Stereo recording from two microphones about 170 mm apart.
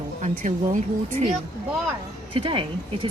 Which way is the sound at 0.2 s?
45° right (ahead or behind).